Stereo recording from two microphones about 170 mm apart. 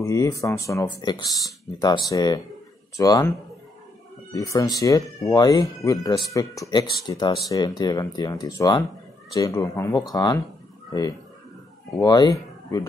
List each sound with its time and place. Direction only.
0.0 s a man's voice: 20° left (ahead or behind)